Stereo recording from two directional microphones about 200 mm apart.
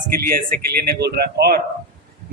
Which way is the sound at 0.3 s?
50° right (ahead or behind).